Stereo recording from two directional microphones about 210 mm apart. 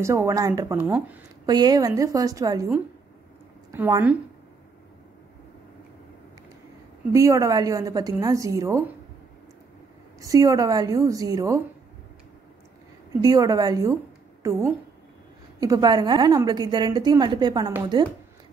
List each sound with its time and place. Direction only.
0.0 s a woman's voice: 15° right (ahead or behind)
1.4 s a woman's voice: 20° right (ahead or behind)
3.7 s a woman's voice: 10° right (ahead or behind)
7.1 s a woman's voice: 15° right (ahead or behind)
10.2 s a woman's voice: 15° right (ahead or behind)
13.2 s a woman's voice: 15° right (ahead or behind)